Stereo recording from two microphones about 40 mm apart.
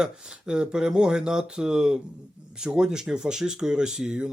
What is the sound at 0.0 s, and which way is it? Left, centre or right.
Speech, right.